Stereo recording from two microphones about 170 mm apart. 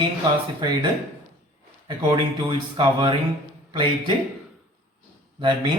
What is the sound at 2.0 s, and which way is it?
A man's voice, 30° right (ahead or behind).